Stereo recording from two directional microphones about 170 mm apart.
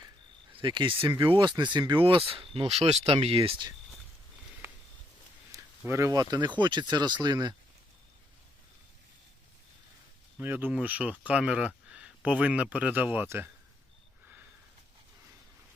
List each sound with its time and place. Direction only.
0.6 s speech: 30° right (ahead or behind)
5.5 s speech: 15° right (ahead or behind)
10.4 s speech: 10° right (ahead or behind)